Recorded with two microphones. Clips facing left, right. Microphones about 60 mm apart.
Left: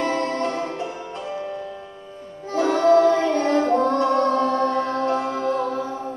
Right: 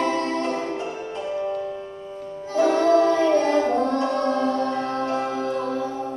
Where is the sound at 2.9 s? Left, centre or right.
Left.